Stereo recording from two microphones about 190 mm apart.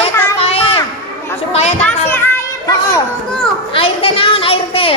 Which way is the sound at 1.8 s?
10° left (ahead or behind).